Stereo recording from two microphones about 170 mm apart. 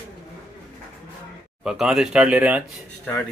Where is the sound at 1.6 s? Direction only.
5° right (ahead or behind).